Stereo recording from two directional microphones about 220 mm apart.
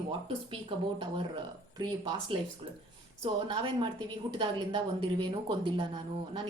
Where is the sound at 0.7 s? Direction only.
25° right (ahead or behind).